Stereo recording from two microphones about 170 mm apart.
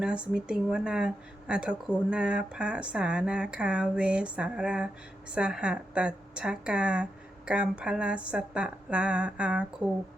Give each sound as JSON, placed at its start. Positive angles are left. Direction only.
{"t": 0.0, "sound": "a woman's voice", "side_deg": -5}